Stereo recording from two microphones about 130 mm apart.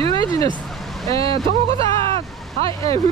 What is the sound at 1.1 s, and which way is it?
Speech, 25° left (ahead or behind).